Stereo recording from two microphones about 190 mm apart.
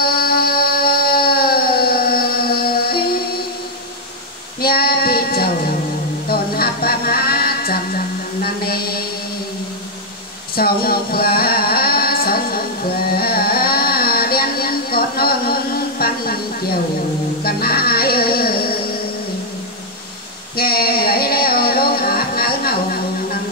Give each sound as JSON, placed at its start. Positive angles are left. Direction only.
{"t": 0.0, "sound": "a sound", "side_deg": 50}
{"t": 4.6, "sound": "child singing", "side_deg": 55}
{"t": 6.2, "sound": "a sound", "side_deg": 55}
{"t": 10.5, "sound": "singing", "side_deg": 50}
{"t": 13.1, "sound": "carnatic music", "side_deg": 50}
{"t": 17.4, "sound": "music", "side_deg": 50}
{"t": 20.5, "sound": "music", "side_deg": 55}